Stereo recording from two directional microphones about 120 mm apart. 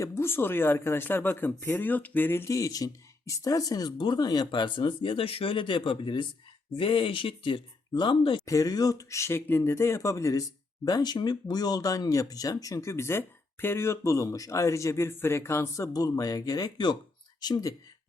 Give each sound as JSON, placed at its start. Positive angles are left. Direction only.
{"t": 0.0, "sound": "speech", "side_deg": 20}
{"t": 8.4, "sound": "speech", "side_deg": 30}